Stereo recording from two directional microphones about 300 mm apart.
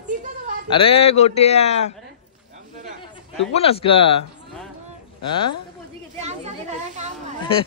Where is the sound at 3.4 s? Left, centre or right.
Centre.